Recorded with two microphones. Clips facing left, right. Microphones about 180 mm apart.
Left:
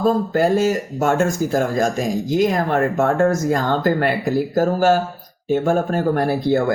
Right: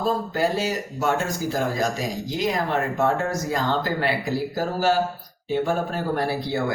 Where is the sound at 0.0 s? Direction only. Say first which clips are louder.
Left 6 dB; 50° left (ahead or behind).